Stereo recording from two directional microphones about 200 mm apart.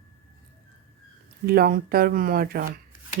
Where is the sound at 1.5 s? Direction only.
50° right (ahead or behind).